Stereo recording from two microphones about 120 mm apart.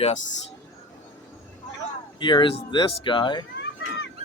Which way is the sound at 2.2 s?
40° left (ahead or behind).